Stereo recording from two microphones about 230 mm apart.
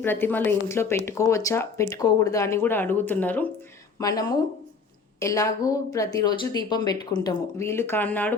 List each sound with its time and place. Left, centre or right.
0.0 s speech: centre